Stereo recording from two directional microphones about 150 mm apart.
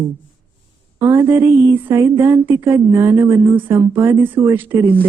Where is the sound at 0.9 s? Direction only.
15° right (ahead or behind).